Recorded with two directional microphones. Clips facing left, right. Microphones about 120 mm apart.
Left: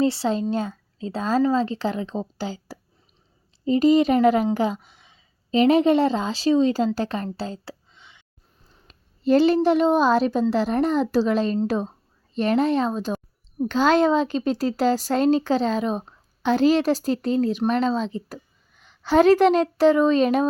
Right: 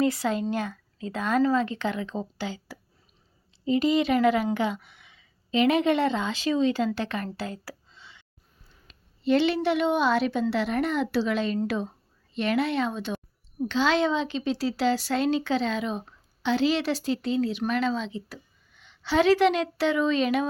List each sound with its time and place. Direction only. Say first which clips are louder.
0.0 s a woman's voice: left 3 dB; 30° left (ahead or behind)
7.3 s a sound: left 3 dB; 30° left (ahead or behind)
8.9 s a woman's voice: left 4 dB; 40° left (ahead or behind)